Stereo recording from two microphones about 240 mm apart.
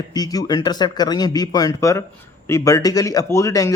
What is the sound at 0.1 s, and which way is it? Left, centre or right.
Speech, centre.